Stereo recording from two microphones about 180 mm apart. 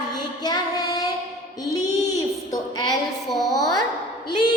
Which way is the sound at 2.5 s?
20° left (ahead or behind).